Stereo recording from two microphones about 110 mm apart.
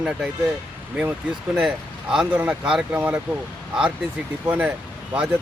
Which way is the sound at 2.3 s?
15° right (ahead or behind).